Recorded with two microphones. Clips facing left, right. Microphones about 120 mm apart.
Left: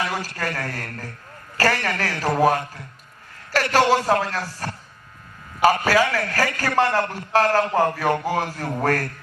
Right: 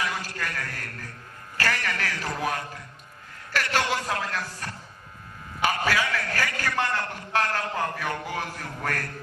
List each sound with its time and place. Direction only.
0.0 s a man's voice: 40° left (ahead or behind)